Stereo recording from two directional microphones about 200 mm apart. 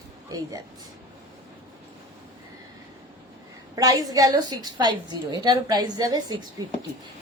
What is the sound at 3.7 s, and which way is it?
A woman's voice, 20° right (ahead or behind).